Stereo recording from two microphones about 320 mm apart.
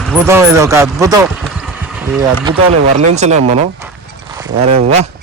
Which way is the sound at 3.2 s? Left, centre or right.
Right.